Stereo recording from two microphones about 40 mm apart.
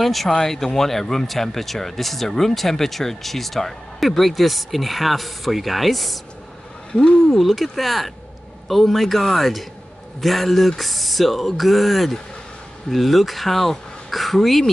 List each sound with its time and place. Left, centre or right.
0.0 s speech: centre
6.9 s speech: centre
7.3 s speech: centre